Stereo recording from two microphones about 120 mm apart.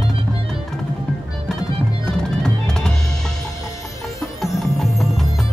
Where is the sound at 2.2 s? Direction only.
5° left (ahead or behind).